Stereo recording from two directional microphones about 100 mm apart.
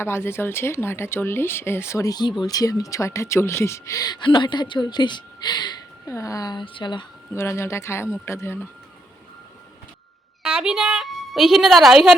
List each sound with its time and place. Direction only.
0.0 s speech: 25° left (ahead or behind); by 5.7 s 45° left (ahead or behind)
6.1 s speech: 35° left (ahead or behind); by 7.1 s 50° left (ahead or behind)
7.3 s speech: 30° left (ahead or behind)
10.4 s a woman's voice: 10° right (ahead or behind)